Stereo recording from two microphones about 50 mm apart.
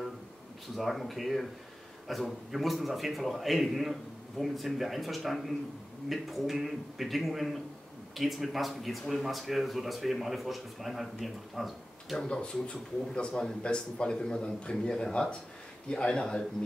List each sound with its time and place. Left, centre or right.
0.7 s a man's voice: centre
12.3 s a man's voice: centre